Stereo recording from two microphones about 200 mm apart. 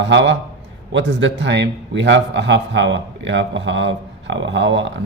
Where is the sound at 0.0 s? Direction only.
60° right (ahead or behind).